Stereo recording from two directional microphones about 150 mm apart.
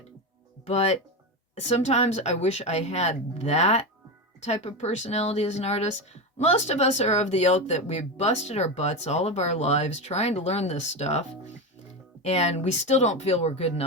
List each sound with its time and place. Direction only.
0.7 s speech: 45° left (ahead or behind)
12.2 s speech: 45° left (ahead or behind)